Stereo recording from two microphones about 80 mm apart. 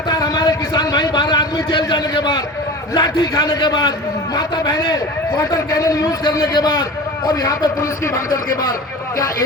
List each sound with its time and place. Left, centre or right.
0.1 s a sound: left
2.9 s a man's voice: left
5.4 s a man's voice: left
6.3 s a man's voice: left